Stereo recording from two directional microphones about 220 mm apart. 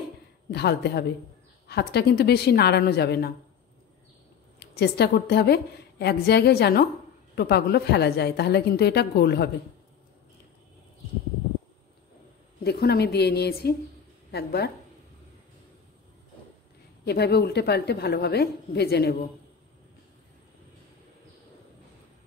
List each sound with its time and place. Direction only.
0.5 s a woman's voice: 45° left (ahead or behind)
4.6 s a woman's voice: 45° left (ahead or behind)
12.6 s a woman's voice: 45° left (ahead or behind)
17.0 s a woman's voice: 50° left (ahead or behind)